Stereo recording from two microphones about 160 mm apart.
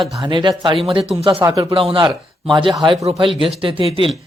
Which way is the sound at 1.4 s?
20° right (ahead or behind).